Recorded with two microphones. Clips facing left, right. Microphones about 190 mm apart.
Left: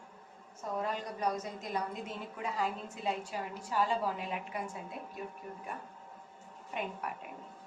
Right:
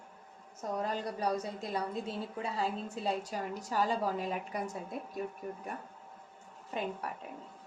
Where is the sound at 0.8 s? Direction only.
35° right (ahead or behind).